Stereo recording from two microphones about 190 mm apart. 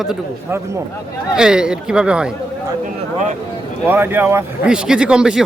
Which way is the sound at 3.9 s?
10° right (ahead or behind).